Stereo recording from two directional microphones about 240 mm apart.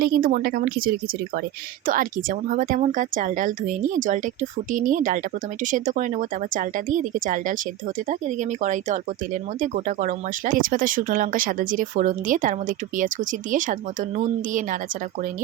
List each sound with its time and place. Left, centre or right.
0.0 s speech: right